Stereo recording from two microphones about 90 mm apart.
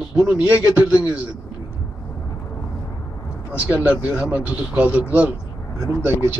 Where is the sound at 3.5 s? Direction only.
15° right (ahead or behind).